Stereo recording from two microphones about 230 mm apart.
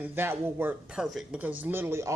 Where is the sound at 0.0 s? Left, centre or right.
Centre.